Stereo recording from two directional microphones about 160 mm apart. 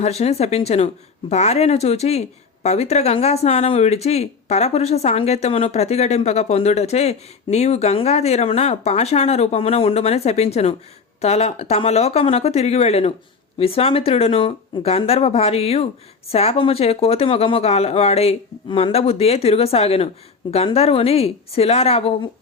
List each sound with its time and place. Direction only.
0.0 s speech: 40° left (ahead or behind)